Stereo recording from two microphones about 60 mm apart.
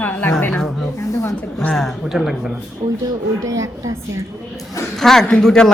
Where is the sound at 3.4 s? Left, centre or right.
Right.